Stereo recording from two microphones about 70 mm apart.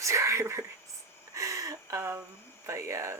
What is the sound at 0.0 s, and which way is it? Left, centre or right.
Speech, right.